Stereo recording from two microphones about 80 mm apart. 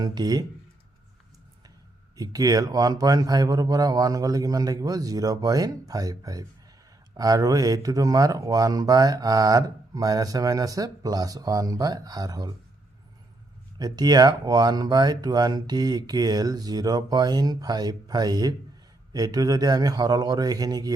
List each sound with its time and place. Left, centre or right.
0.0 s speech: right
2.1 s speech: right
13.7 s speech: right